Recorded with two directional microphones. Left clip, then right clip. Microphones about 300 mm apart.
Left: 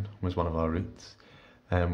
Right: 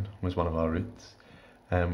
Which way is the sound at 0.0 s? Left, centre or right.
Centre.